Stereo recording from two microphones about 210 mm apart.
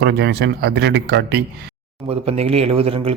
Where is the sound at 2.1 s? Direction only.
30° right (ahead or behind).